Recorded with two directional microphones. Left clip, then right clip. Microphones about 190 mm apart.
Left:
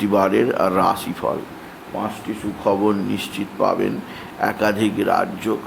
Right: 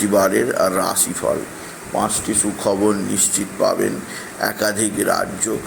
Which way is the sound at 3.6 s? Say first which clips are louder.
Right 1 dB; 5° left (ahead or behind).